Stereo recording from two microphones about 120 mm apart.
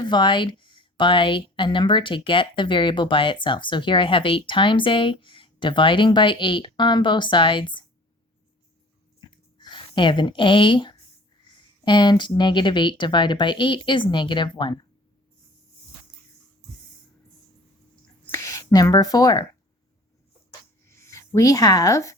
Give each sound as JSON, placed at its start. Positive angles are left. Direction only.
{"t": 0.0, "sound": "a woman's voice", "side_deg": 40}
{"t": 9.3, "sound": "a sound", "side_deg": 40}
{"t": 11.4, "sound": "speech", "side_deg": 40}
{"t": 18.3, "sound": "speech", "side_deg": 25}
{"t": 20.8, "sound": "writing", "side_deg": 20}